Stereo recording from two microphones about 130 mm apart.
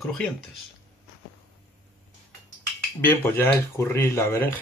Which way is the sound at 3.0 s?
15° left (ahead or behind).